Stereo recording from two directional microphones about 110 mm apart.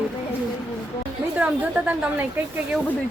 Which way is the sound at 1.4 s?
10° right (ahead or behind).